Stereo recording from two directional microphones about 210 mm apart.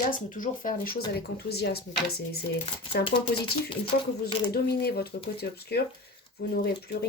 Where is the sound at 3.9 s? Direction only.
50° left (ahead or behind).